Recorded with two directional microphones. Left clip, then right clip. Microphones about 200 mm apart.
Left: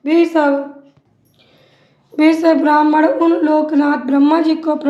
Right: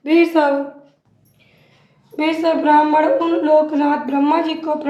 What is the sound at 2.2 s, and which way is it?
A woman's voice, 45° left (ahead or behind).